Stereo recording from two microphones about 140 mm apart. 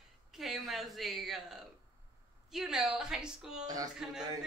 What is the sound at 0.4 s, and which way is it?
Speech, centre (ahead or behind).